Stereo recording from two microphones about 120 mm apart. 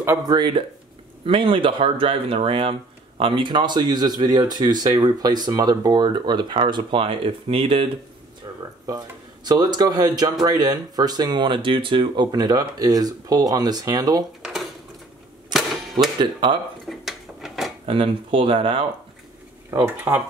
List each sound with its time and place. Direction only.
0.3 s speech: 40° right (ahead or behind)
8.5 s a sound: 30° right (ahead or behind)
8.8 s speech: 30° right (ahead or behind)
14.4 s a sound: centre (ahead or behind)
15.5 s cap gun: centre (ahead or behind)
16.2 s speech: 40° right (ahead or behind)
16.8 s dishes: centre (ahead or behind)
17.8 s speech: 50° right (ahead or behind)
20.1 s speech: 25° right (ahead or behind)